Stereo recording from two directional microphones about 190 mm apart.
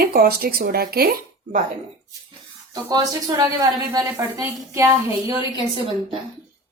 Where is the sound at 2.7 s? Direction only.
20° right (ahead or behind).